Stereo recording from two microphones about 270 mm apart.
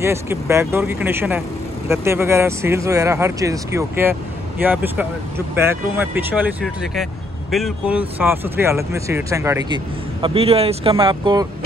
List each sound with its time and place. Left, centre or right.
0.0 s speech: centre